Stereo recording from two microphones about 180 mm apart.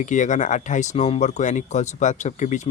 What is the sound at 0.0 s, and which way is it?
Speech, 45° left (ahead or behind).